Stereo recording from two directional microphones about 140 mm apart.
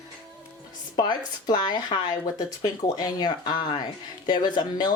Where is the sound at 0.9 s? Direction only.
30° left (ahead or behind).